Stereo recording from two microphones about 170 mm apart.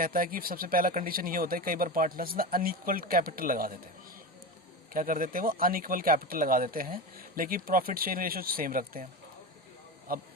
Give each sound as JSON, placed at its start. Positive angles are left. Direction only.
{"t": 0.0, "sound": "speech", "side_deg": -55}
{"t": 4.9, "sound": "speech", "side_deg": -55}